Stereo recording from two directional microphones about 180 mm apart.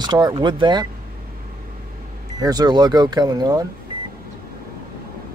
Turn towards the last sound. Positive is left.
turn(degrees=-20)  # may be behind; listen again after turning